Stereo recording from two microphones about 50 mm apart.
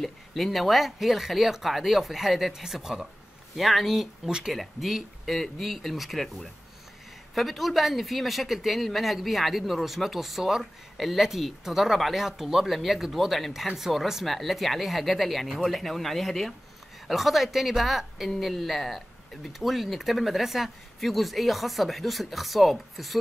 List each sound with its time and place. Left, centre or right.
0.0 s speech: centre
3.5 s speech: centre
7.3 s speech: centre